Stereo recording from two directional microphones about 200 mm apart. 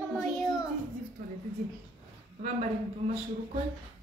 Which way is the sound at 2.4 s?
35° right (ahead or behind).